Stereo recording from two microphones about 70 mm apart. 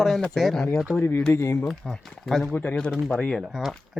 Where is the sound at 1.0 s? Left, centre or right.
Left.